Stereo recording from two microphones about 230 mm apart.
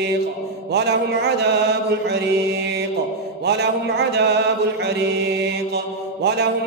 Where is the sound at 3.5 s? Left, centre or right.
Right.